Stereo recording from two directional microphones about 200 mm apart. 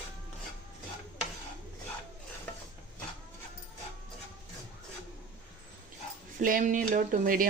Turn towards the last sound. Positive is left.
turn(degrees=-45)  # may be behind; listen again after turning